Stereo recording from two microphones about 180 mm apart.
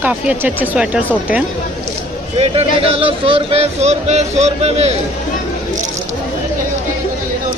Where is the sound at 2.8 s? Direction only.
30° right (ahead or behind).